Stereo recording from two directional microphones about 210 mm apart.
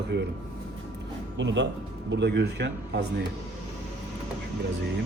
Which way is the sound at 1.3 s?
60° right (ahead or behind).